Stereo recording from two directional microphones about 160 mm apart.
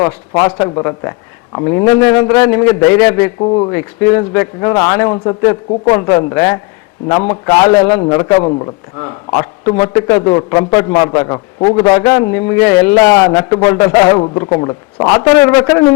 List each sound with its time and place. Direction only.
0.0 s a man's voice: 20° left (ahead or behind)
3.4 s a man's voice: 30° left (ahead or behind)
3.7 s a man's voice: 15° left (ahead or behind)
14.2 s a man's voice: 30° left (ahead or behind)